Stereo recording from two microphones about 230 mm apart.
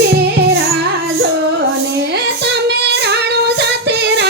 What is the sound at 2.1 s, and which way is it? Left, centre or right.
Female singing, right.